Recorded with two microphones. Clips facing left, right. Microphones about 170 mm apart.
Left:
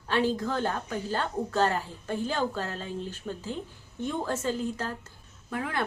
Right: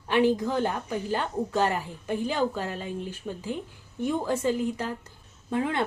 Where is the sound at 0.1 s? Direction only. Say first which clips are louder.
Right 4 dB; 15° right (ahead or behind).